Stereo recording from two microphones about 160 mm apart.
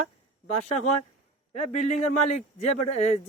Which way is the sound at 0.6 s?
50° left (ahead or behind).